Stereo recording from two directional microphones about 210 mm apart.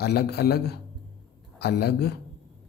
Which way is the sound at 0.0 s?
50° left (ahead or behind).